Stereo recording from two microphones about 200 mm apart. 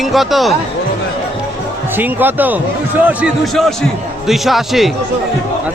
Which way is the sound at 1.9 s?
10° right (ahead or behind).